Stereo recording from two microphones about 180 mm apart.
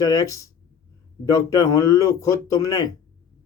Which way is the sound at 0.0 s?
20° left (ahead or behind).